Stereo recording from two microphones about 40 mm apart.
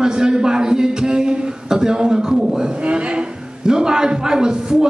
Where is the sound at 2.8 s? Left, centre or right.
Right.